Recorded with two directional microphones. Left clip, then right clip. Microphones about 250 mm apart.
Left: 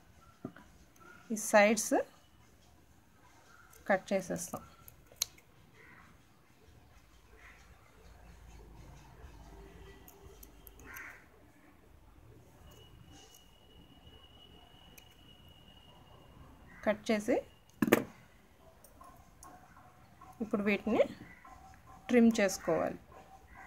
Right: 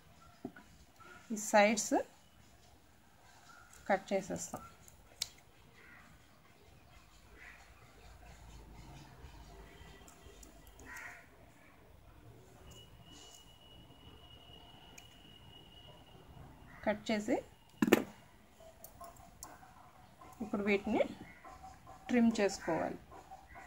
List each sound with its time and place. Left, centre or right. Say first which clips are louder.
1.3 s a woman's voice: left 3 dB; centre
3.8 s a woman's voice: left 2 dB; centre
16.8 s a sound: left 4 dB; centre
20.5 s a woman's voice: left 3 dB; centre